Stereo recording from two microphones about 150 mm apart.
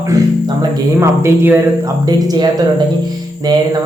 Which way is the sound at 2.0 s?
25° right (ahead or behind).